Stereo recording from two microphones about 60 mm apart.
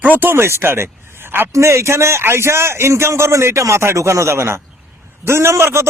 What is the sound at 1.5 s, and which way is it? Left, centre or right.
A man's voice, right.